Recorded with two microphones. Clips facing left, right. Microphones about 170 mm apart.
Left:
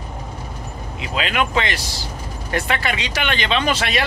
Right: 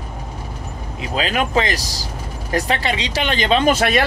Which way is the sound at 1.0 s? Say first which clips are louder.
Right 1 dB; 35° right (ahead or behind).